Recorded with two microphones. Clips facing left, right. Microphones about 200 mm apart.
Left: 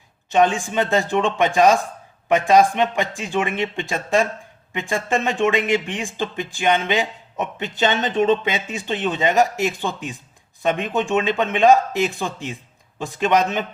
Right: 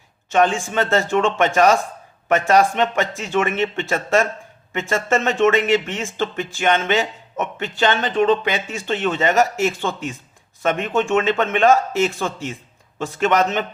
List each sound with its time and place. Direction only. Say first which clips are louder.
0.3 s speech: even; 15° left (ahead or behind)